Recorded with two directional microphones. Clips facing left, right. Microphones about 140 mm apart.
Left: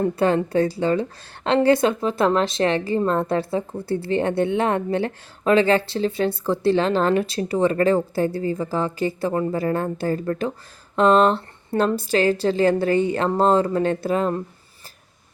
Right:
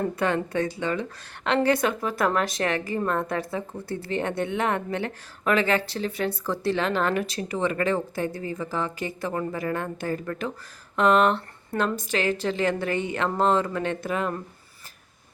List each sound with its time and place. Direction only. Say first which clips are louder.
0.2 s speech: left 7 dB; 30° left (ahead or behind)